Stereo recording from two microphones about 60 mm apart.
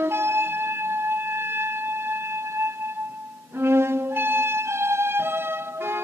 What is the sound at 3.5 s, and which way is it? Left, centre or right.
Violin, right.